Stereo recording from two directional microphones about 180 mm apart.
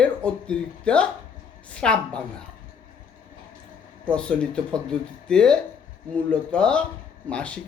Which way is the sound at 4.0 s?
5° left (ahead or behind).